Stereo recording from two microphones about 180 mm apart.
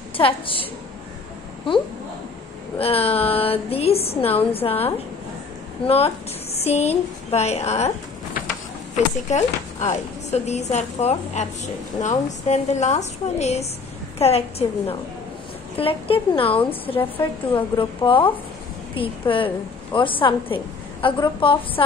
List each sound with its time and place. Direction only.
0.2 s speech: 30° left (ahead or behind)
2.8 s a woman's voice: 35° left (ahead or behind)
8.9 s a woman's voice: 40° left (ahead or behind)
15.8 s a woman's voice: 30° left (ahead or behind)